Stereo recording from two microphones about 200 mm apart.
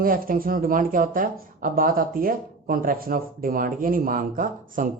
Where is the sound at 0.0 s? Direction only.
45° right (ahead or behind).